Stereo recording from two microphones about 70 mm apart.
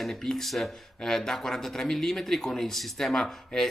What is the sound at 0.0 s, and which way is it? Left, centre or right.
Speech, centre.